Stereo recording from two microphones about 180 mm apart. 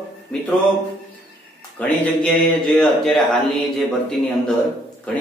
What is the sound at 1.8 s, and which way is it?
Speech, 5° left (ahead or behind).